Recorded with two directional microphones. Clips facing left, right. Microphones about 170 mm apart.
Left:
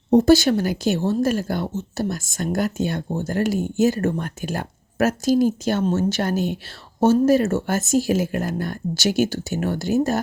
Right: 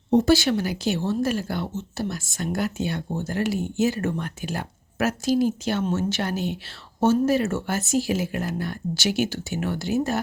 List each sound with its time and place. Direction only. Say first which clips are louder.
0.1 s speech: left 4 dB; 40° left (ahead or behind)